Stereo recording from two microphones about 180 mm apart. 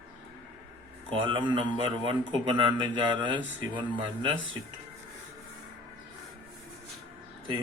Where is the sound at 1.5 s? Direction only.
25° right (ahead or behind).